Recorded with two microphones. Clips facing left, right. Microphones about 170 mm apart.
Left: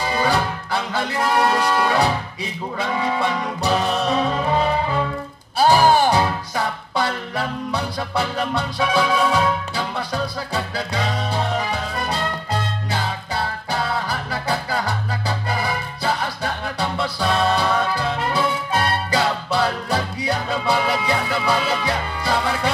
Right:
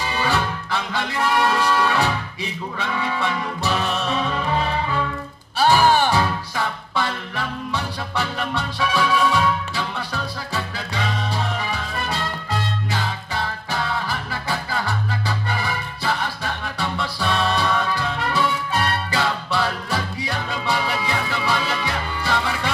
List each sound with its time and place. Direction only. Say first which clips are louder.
0.0 s music: left 3 dB; 35° left (ahead or behind)